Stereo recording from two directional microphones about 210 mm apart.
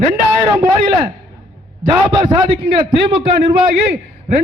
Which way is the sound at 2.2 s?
25° right (ahead or behind).